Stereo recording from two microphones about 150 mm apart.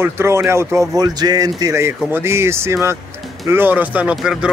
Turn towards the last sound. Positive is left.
turn(degrees=-5)  # may be behind; listen again after turning